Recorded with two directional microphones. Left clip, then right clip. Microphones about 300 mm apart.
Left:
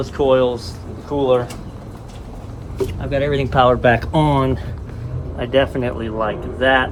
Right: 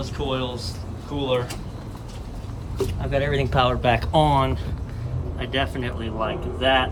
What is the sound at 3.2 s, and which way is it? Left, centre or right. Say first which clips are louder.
Speech: left 6 dB; centre.